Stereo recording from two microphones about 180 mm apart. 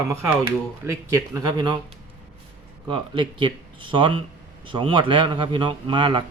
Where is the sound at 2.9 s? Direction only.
30° right (ahead or behind).